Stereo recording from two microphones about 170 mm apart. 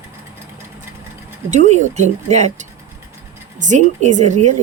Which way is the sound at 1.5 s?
45° right (ahead or behind).